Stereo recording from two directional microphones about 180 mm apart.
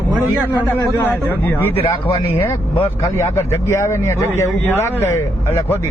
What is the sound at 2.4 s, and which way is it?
Speech, 10° left (ahead or behind).